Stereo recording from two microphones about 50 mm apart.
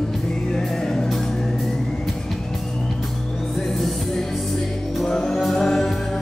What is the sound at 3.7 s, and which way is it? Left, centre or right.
Music, centre.